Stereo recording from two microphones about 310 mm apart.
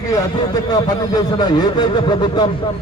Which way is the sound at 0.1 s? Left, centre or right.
Centre.